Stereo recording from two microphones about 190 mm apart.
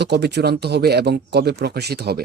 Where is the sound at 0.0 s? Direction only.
60° right (ahead or behind).